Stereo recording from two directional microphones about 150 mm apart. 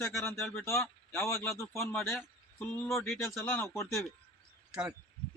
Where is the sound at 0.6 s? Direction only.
20° left (ahead or behind).